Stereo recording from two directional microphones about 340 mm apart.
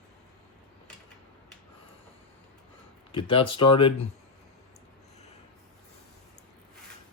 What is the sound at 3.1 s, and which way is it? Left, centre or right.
Speech, centre.